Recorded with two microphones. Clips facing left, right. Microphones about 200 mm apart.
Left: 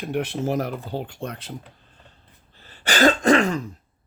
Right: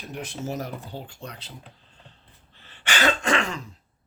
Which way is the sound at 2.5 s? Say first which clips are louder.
Left 5 dB; 40° left (ahead or behind).